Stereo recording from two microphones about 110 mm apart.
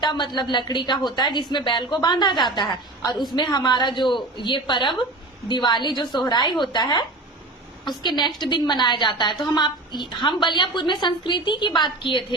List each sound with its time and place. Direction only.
0.0 s a woman's voice: 40° left (ahead or behind)